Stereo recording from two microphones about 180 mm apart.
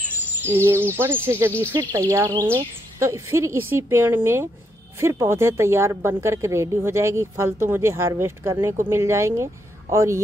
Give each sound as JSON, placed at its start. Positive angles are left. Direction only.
{"t": 0.2, "sound": "speech", "side_deg": -15}
{"t": 1.7, "sound": "a woman's voice", "side_deg": -25}